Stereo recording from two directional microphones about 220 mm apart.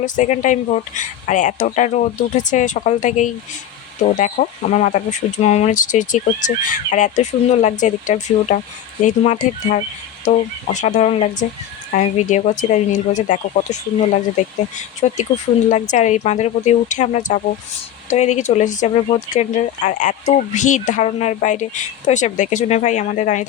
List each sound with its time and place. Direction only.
0.0 s speech: 35° left (ahead or behind)